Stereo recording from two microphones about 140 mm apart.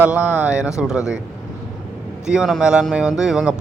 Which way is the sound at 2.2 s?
5° right (ahead or behind).